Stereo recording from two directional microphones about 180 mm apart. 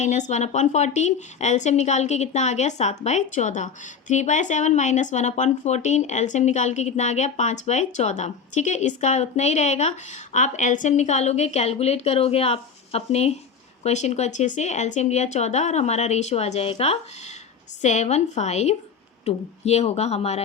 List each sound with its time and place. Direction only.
0.0 s speech: 40° left (ahead or behind)